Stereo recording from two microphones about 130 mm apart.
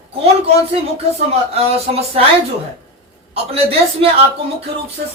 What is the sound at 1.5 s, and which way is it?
Speech, 50° right (ahead or behind).